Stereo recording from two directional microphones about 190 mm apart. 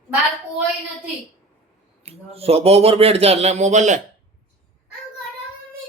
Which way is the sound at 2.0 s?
30° right (ahead or behind).